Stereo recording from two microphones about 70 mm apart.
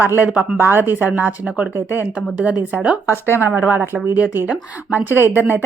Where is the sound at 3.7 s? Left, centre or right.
Right.